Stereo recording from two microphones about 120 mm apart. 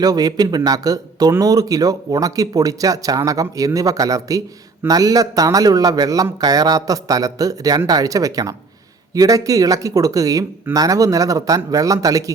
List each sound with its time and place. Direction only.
0.0 s speech: 30° right (ahead or behind)